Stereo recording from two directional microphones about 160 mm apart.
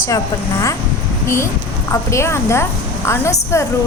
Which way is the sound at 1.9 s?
20° left (ahead or behind).